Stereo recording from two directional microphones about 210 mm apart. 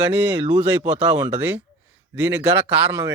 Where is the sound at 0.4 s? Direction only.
20° right (ahead or behind).